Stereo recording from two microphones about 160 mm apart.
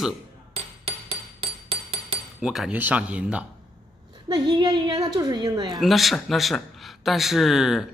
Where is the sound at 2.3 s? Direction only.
5° right (ahead or behind).